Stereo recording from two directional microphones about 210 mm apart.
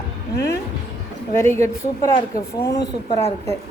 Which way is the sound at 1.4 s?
15° left (ahead or behind).